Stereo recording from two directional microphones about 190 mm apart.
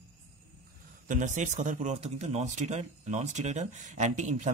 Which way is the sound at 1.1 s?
40° right (ahead or behind).